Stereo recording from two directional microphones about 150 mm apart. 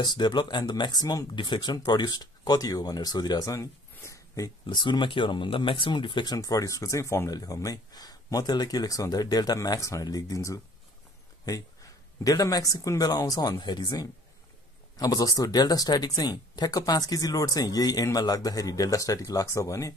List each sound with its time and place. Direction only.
0.0 s speech: 30° left (ahead or behind)